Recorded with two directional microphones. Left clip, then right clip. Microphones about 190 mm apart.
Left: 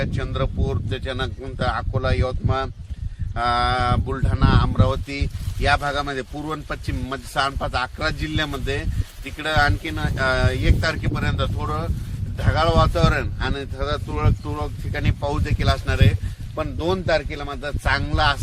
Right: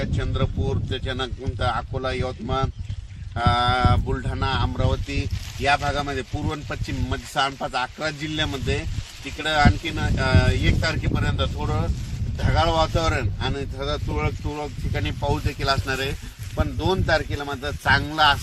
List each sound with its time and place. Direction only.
0.0 s speech: 5° right (ahead or behind)
14.5 s speech: centre (ahead or behind); by 16.0 s 15° left (ahead or behind)
16.6 s a man's voice: 25° left (ahead or behind)